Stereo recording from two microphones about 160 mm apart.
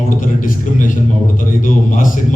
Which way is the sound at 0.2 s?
55° left (ahead or behind).